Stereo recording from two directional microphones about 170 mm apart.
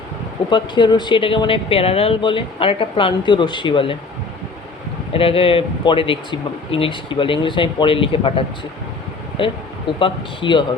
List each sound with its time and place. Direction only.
0.5 s speech: 30° left (ahead or behind)
5.1 s speech: 35° left (ahead or behind)